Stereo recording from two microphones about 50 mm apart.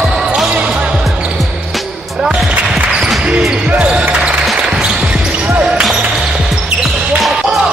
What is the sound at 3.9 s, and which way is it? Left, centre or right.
Basketball bounce, right.